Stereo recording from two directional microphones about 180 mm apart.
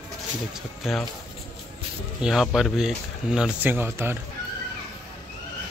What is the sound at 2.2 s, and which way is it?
Speech, centre (ahead or behind).